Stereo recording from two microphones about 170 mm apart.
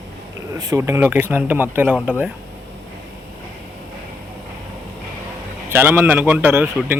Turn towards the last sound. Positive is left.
turn(degrees=-10)  # may be behind; listen again after turning